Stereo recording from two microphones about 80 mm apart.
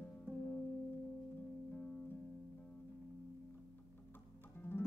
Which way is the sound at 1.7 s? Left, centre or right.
Centre.